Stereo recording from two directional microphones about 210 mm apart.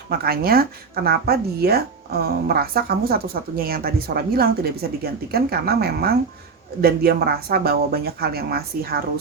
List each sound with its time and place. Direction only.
0.1 s speech: 45° right (ahead or behind)